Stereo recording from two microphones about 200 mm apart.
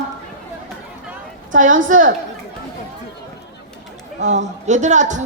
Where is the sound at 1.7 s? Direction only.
75° right (ahead or behind).